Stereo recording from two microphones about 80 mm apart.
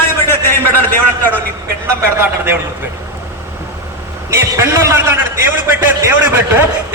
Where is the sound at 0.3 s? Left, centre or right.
Left.